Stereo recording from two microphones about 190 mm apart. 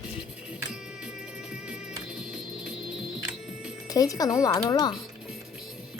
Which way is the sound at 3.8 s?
20° left (ahead or behind).